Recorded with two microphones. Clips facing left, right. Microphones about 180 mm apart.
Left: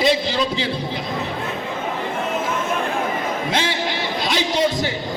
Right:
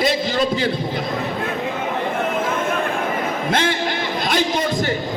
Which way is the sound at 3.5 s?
50° right (ahead or behind).